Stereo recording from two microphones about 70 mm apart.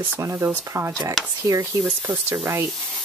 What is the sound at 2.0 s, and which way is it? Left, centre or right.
Speech, right.